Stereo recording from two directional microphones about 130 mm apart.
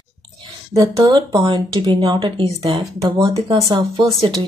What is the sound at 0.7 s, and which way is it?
A woman's voice, 30° right (ahead or behind).